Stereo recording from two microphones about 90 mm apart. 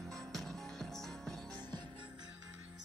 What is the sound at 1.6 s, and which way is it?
Music, 55° right (ahead or behind).